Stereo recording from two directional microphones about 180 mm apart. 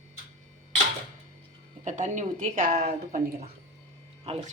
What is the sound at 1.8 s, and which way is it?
Speech, 45° right (ahead or behind).